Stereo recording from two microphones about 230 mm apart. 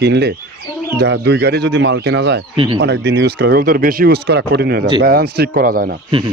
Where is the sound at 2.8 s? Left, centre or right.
Right.